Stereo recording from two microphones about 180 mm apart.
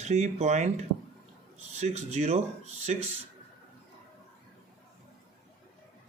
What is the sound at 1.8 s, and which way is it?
Speech, 40° right (ahead or behind).